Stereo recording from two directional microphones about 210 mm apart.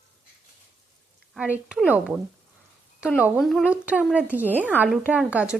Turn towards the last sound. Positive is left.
turn(degrees=-5)  # may be behind; listen again after turning